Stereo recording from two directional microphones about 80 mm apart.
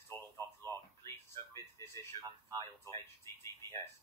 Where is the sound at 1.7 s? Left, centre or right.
Left.